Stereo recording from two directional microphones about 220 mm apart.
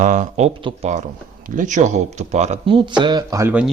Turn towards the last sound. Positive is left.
turn(degrees=-10)  # may be behind; listen again after turning